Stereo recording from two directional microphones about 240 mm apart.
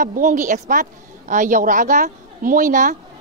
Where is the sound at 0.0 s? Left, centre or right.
Right.